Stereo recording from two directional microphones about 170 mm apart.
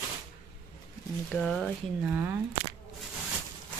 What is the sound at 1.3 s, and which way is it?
Speech, centre (ahead or behind).